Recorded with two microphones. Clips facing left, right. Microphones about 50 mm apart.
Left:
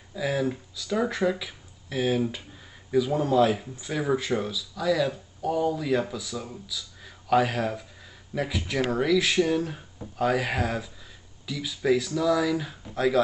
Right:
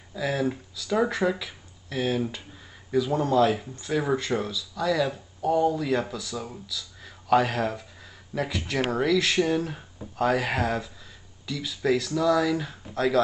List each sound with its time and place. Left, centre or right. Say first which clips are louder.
0.1 s speech: even; centre